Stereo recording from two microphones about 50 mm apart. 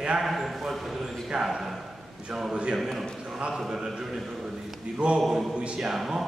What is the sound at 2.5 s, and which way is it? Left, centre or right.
Speech, right.